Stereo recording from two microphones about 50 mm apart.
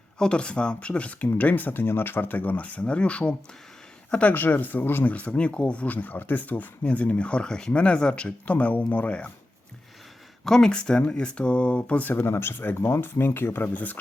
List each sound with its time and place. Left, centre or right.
0.2 s speech: centre
4.4 s speech: left
5.1 s speech: left
10.4 s speech: centre; by 12.2 s left
12.2 s speech: left
13.7 s speech: left